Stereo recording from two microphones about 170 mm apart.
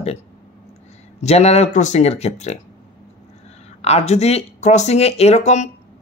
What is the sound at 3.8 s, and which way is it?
Speech, 40° left (ahead or behind).